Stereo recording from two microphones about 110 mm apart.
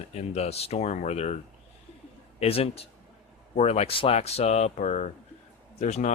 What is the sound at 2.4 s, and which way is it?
A man's voice, 65° left (ahead or behind).